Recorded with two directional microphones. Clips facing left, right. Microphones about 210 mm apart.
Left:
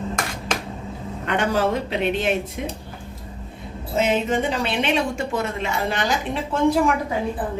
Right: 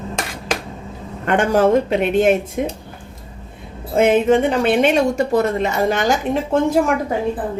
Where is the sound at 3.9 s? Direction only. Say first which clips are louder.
Right 7 dB; 55° right (ahead or behind).